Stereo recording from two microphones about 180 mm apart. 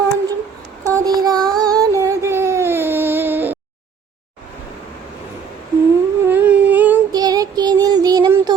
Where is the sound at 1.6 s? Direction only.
20° right (ahead or behind).